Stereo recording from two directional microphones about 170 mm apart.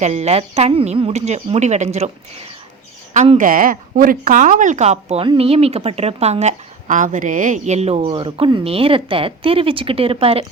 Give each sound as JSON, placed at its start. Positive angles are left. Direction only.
{"t": 0.0, "sound": "speech", "side_deg": -40}
{"t": 3.1, "sound": "speech", "side_deg": -45}